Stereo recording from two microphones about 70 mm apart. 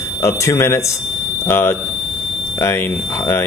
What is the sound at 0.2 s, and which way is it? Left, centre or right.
A man's voice, left.